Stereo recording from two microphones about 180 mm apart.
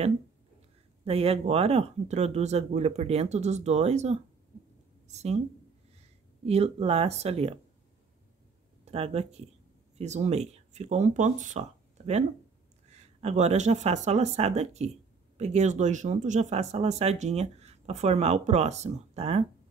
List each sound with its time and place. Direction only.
1.0 s speech: 35° right (ahead or behind)
6.4 s speech: 35° right (ahead or behind)
8.9 s speech: 35° right (ahead or behind)